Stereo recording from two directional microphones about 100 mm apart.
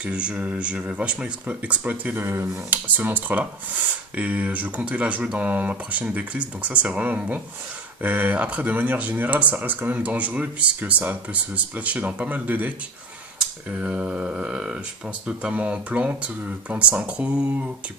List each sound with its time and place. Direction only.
0.0 s speech: 10° right (ahead or behind)